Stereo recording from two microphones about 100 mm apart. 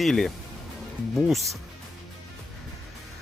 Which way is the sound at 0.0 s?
5° left (ahead or behind).